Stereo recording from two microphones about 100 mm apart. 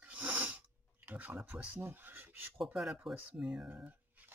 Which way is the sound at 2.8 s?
5° right (ahead or behind).